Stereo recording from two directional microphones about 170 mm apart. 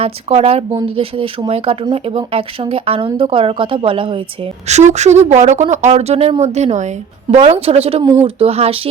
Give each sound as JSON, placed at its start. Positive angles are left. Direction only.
{"t": 0.0, "sound": "speech", "side_deg": -35}
{"t": 4.7, "sound": "speech", "side_deg": -40}